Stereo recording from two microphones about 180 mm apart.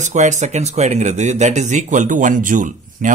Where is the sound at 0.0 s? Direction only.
40° right (ahead or behind).